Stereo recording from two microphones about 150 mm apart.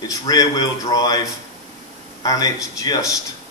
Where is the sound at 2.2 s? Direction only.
25° left (ahead or behind).